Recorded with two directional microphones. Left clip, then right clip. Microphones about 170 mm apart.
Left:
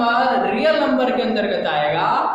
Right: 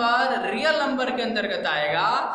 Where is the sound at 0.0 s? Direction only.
5° right (ahead or behind).